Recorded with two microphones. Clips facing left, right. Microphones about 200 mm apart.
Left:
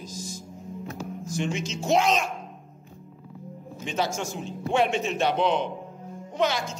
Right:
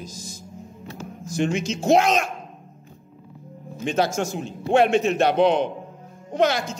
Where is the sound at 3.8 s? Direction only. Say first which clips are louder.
Right 6 dB; 60° right (ahead or behind).